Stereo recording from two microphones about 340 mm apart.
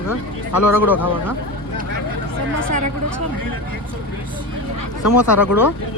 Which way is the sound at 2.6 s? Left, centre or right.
Right.